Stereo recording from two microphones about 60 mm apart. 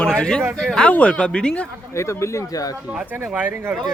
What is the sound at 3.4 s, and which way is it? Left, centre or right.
Speech, right.